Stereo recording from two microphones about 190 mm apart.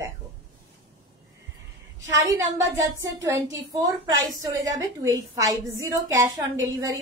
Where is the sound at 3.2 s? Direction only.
20° right (ahead or behind).